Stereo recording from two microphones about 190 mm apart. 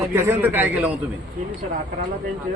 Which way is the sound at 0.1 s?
15° right (ahead or behind).